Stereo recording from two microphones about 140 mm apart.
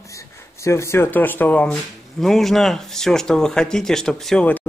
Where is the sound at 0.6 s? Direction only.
20° left (ahead or behind).